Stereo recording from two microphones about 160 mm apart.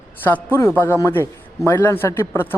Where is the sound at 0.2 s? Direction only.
10° left (ahead or behind).